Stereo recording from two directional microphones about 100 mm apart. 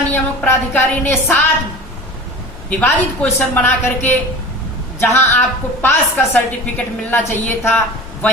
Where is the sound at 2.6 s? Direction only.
15° left (ahead or behind).